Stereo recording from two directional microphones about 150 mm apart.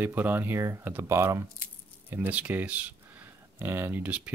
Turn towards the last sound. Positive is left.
turn(degrees=-10)  # may be behind; listen again after turning